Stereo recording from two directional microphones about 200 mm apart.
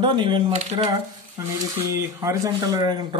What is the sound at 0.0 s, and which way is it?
Speech, 25° right (ahead or behind).